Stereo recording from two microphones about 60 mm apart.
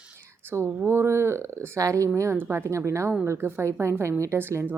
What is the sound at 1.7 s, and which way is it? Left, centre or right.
Speech, right.